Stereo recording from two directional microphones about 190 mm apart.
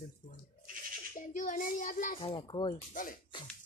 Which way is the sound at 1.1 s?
45° left (ahead or behind).